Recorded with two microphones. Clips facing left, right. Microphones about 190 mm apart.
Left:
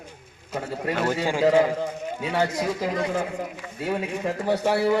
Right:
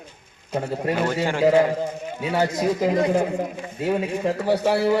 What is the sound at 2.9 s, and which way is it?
Speech, 35° right (ahead or behind).